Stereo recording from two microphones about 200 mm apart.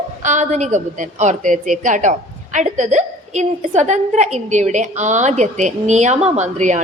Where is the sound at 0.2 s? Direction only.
35° right (ahead or behind).